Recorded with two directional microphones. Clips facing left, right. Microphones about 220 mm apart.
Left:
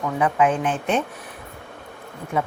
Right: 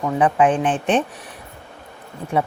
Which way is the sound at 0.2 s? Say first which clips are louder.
Right 3 dB; 30° right (ahead or behind).